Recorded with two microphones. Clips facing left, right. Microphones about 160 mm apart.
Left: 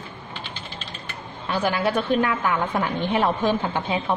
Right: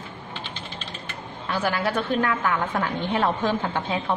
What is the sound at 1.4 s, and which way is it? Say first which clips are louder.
A woman's voice: left 2 dB; 15° left (ahead or behind).